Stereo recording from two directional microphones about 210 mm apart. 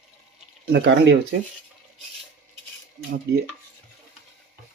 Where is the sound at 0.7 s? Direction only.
55° right (ahead or behind).